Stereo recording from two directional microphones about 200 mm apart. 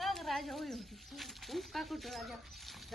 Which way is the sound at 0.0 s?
Centre (ahead or behind).